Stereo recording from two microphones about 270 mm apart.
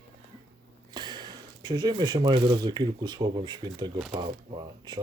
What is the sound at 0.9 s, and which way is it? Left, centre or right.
Speech, centre.